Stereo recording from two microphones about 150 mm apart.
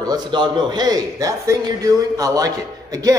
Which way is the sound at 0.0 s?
30° right (ahead or behind).